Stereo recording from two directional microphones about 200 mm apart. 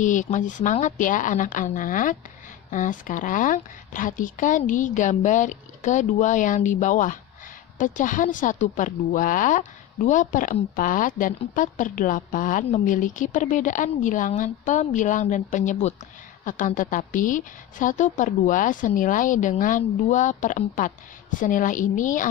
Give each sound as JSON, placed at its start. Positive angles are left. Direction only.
{"t": 0.0, "sound": "speech", "side_deg": 40}